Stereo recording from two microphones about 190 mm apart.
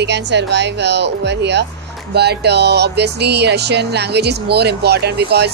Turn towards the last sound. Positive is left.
turn(degrees=-60)  # may be behind; listen again after turning